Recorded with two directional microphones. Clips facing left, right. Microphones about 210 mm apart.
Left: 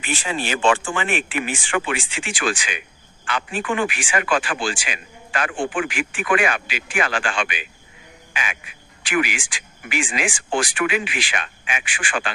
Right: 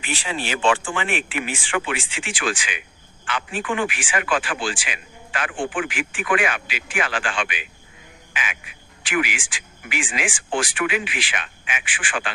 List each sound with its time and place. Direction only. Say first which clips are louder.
0.0 s speech: left 2 dB; 45° left (ahead or behind)
8.3 s frog: left 2 dB; 40° left (ahead or behind)
9.0 s speech: left 2 dB; 40° left (ahead or behind)